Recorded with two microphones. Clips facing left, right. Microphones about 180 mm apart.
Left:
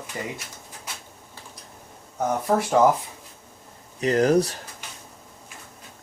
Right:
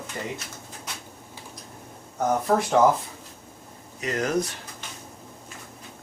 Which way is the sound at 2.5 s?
10° left (ahead or behind).